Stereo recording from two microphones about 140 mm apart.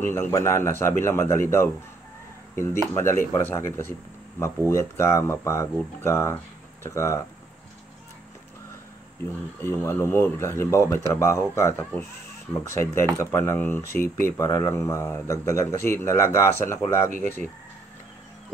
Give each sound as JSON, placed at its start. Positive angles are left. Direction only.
{"t": 0.1, "sound": "speech", "side_deg": 20}
{"t": 9.6, "sound": "speech", "side_deg": 15}
{"t": 14.0, "sound": "speech", "side_deg": -65}
{"t": 14.3, "sound": "speech", "side_deg": 20}
{"t": 17.1, "sound": "speech", "side_deg": -65}